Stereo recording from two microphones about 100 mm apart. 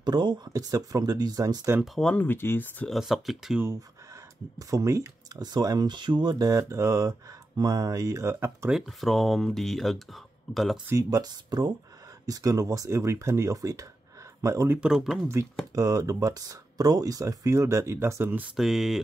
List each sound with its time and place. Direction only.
0.0 s speech: 45° right (ahead or behind)
2.0 s speech: 10° left (ahead or behind)
2.2 s speech: 20° left (ahead or behind)
2.9 s speech: centre (ahead or behind)
4.6 s speech: 35° right (ahead or behind)
5.4 s speech: 45° right (ahead or behind)
6.3 s speech: 35° right (ahead or behind)
8.6 s speech: centre (ahead or behind)
10.9 s speech: 35° right (ahead or behind)
14.8 s speech: 5° right (ahead or behind)
15.7 s speech: 35° right (ahead or behind)
18.6 s speech: 5° right (ahead or behind)